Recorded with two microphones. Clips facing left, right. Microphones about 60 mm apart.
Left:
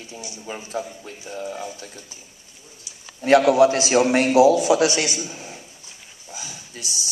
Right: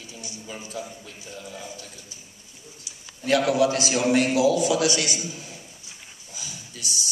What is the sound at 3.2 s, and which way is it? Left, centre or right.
A man's voice, left.